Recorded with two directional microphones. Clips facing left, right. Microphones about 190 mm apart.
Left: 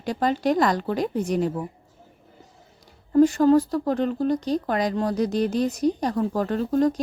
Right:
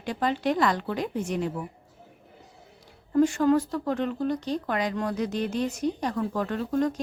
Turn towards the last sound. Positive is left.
turn(degrees=35)  # may be behind; listen again after turning